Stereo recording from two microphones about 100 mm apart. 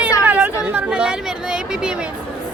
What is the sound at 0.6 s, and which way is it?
Speech, 15° right (ahead or behind).